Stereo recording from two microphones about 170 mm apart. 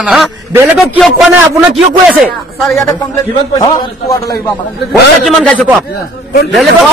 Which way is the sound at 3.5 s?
20° left (ahead or behind).